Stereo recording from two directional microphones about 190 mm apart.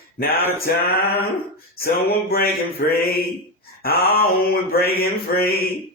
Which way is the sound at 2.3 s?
55° left (ahead or behind).